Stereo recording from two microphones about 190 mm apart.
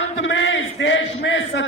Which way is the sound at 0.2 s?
75° left (ahead or behind).